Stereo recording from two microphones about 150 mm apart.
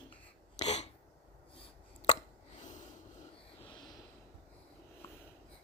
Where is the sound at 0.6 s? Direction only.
50° left (ahead or behind).